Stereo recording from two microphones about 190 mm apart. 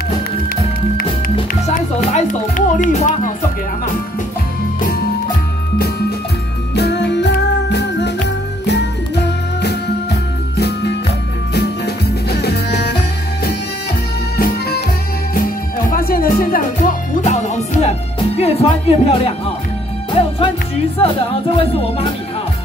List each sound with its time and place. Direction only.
1.5 s music: 40° left (ahead or behind)
6.7 s music: 60° left (ahead or behind)
14.3 s music: 55° left (ahead or behind)
15.9 s music: 50° left (ahead or behind); by 22.1 s 30° left (ahead or behind)